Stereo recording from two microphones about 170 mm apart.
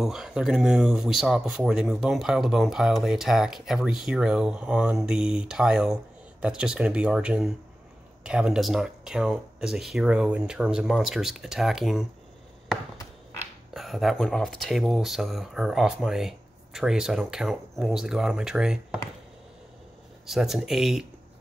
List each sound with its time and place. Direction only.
0.0 s speech: centre (ahead or behind)
13.7 s speech: centre (ahead or behind)
20.2 s speech: centre (ahead or behind)